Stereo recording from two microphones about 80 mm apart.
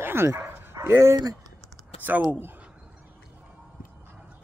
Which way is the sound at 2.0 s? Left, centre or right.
Right.